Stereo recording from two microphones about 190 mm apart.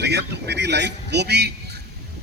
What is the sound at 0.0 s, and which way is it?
A man's voice, 60° right (ahead or behind).